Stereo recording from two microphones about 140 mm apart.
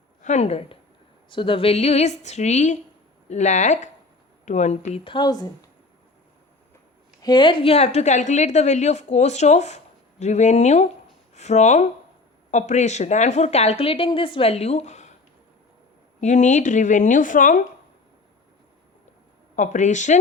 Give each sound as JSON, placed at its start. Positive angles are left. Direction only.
{"t": 0.2, "sound": "a woman's voice", "side_deg": 55}
{"t": 5.0, "sound": "speech", "side_deg": 30}
{"t": 7.2, "sound": "a woman's voice", "side_deg": 30}
{"t": 16.2, "sound": "a woman's voice", "side_deg": 60}
{"t": 19.5, "sound": "a woman's voice", "side_deg": 60}